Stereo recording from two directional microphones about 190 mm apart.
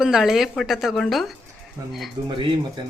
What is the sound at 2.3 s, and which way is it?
Speech, 25° right (ahead or behind).